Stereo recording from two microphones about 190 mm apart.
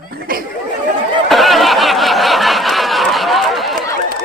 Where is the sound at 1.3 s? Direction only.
Centre (ahead or behind).